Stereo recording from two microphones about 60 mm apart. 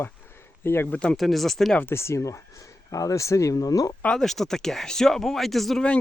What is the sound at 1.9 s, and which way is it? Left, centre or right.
Speech, left.